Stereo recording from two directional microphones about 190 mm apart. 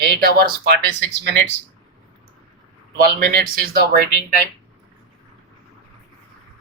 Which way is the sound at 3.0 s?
50° right (ahead or behind).